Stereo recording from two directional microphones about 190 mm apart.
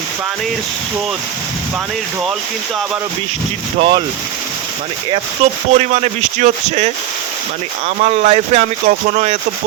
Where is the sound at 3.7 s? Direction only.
30° right (ahead or behind).